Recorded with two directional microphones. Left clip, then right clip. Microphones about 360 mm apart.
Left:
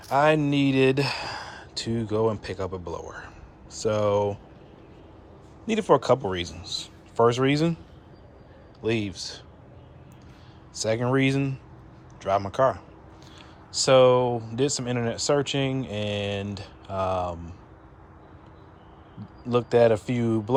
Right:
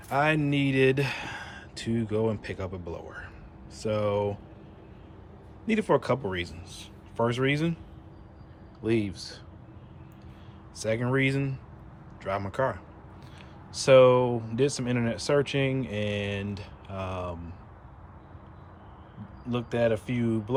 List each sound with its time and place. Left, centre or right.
0.1 s speech: centre
5.6 s speech: centre
8.8 s speech: centre
10.8 s speech: centre
19.5 s speech: centre